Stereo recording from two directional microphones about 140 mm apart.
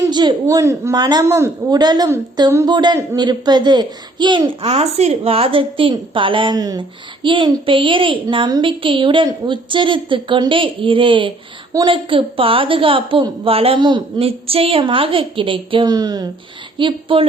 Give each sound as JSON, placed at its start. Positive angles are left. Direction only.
{"t": 0.1, "sound": "a woman's voice", "side_deg": -30}
{"t": 16.7, "sound": "a child's voice", "side_deg": -35}